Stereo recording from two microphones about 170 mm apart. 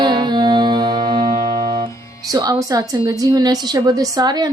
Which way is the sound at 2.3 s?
25° right (ahead or behind).